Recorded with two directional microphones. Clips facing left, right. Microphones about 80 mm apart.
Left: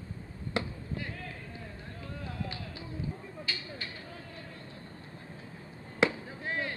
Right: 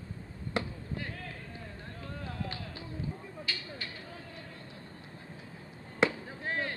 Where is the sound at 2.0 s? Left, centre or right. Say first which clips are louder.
Even; right.